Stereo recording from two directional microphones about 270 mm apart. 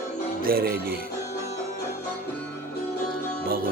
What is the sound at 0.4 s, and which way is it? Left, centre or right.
Speech, right.